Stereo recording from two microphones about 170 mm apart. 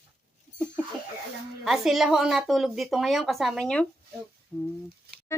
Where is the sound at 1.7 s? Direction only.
Centre (ahead or behind).